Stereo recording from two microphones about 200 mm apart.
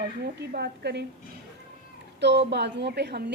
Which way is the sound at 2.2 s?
60° right (ahead or behind).